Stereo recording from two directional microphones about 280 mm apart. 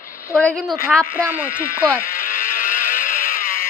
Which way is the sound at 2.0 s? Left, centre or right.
Left.